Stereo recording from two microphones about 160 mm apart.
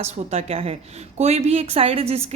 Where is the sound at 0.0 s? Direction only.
40° right (ahead or behind).